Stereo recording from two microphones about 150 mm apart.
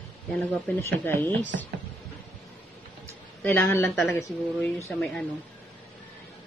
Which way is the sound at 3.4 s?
15° left (ahead or behind).